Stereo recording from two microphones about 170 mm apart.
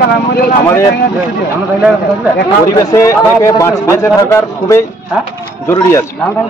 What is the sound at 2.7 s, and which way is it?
Speech, 20° left (ahead or behind).